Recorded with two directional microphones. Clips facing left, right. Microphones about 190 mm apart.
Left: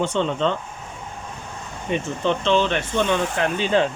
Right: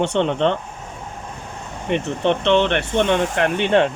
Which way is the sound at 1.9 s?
65° right (ahead or behind).